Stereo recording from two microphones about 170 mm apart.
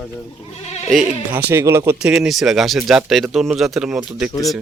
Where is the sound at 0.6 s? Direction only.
40° left (ahead or behind).